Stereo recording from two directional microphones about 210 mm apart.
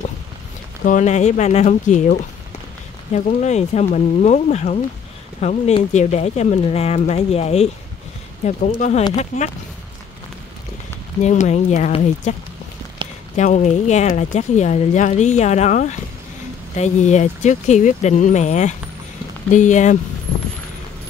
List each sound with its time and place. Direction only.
0.8 s speech: 35° left (ahead or behind)
11.1 s speech: 35° left (ahead or behind)
13.0 s a sound: 25° right (ahead or behind)
13.4 s speech: 35° left (ahead or behind)